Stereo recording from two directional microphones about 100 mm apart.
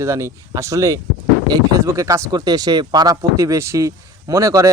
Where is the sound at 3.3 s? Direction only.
30° right (ahead or behind).